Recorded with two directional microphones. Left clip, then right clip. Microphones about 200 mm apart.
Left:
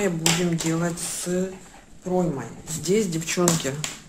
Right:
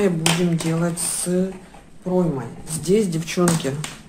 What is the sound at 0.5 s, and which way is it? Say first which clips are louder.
Speech: right 2 dB; centre (ahead or behind).